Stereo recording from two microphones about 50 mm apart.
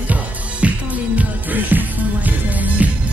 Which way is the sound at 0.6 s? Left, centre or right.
Right.